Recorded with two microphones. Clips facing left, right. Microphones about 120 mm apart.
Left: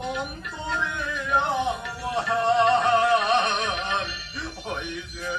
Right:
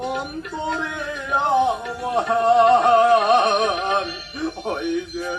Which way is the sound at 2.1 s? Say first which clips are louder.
Right 6 dB; 45° right (ahead or behind).